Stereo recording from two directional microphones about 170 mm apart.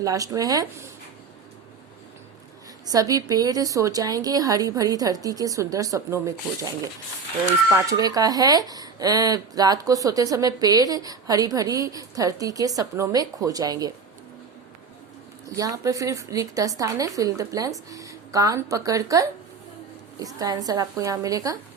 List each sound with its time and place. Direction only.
0.0 s speech: 20° right (ahead or behind)
2.8 s speech: 20° right (ahead or behind)
7.7 s speech: 20° right (ahead or behind)
15.4 s speech: 20° right (ahead or behind)